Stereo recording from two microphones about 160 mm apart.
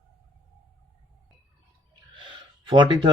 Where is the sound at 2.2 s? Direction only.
30° right (ahead or behind).